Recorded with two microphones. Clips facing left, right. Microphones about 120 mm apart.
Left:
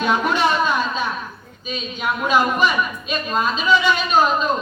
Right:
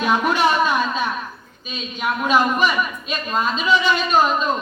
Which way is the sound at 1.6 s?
Centre (ahead or behind).